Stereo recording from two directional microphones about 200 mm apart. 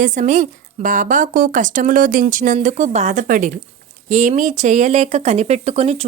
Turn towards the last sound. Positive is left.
turn(degrees=-30)  # may be behind; listen again after turning